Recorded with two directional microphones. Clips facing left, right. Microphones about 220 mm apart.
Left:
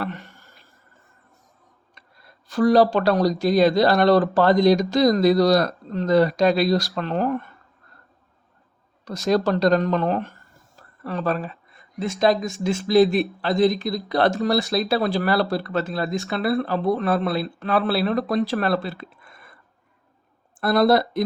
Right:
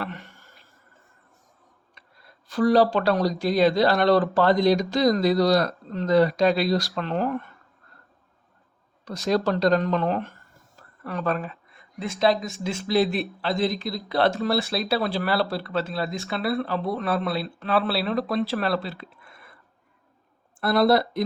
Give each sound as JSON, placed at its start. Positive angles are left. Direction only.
{"t": 2.5, "sound": "speech", "side_deg": 45}
{"t": 9.0, "sound": "speech", "side_deg": 45}
{"t": 12.2, "sound": "speech", "side_deg": 45}
{"t": 20.6, "sound": "speech", "side_deg": 45}